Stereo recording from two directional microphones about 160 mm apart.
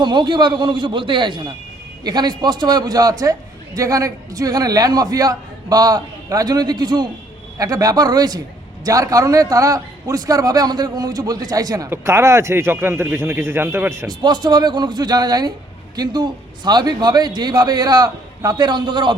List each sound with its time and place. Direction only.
0.0 s a man's voice: 30° right (ahead or behind)
14.2 s a man's voice: 25° right (ahead or behind)